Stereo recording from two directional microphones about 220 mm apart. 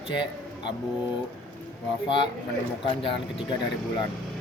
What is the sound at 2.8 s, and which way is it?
Speech, 25° left (ahead or behind).